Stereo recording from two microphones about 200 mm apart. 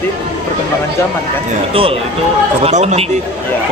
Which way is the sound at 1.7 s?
25° right (ahead or behind).